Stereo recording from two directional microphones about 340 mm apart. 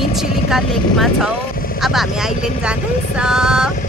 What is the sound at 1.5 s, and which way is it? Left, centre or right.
Vehicle, left.